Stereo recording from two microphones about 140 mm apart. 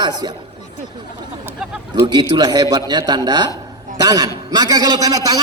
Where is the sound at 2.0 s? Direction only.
30° right (ahead or behind).